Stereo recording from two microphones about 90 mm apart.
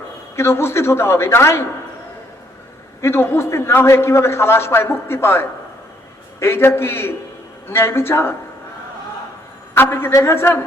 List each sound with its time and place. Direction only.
0.3 s a man's voice: 30° left (ahead or behind)
3.0 s a man's voice: 25° left (ahead or behind)
9.7 s a man's voice: 25° left (ahead or behind)